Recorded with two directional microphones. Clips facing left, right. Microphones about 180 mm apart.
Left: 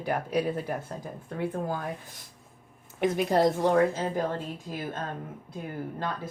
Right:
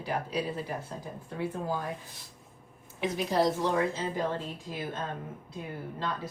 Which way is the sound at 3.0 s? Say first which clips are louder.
Left 4 dB; 55° left (ahead or behind).